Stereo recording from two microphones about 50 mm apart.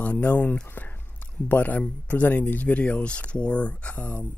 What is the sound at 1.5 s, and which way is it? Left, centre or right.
Speech, left.